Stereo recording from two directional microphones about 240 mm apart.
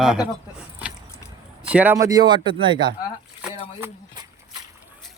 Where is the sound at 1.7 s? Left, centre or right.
Centre.